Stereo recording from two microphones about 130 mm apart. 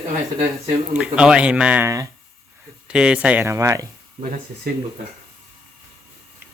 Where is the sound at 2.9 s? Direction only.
10° right (ahead or behind).